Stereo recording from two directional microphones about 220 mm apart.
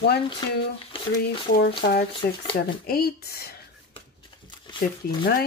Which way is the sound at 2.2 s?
45° left (ahead or behind).